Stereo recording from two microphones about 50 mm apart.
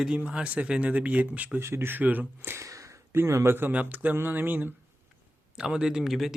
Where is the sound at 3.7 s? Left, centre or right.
Right.